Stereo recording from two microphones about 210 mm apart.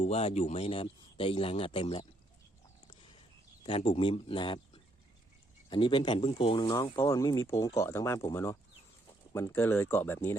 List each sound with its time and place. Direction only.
0.0 s speech: 30° left (ahead or behind)
3.6 s speech: 25° left (ahead or behind); by 10.2 s 10° left (ahead or behind)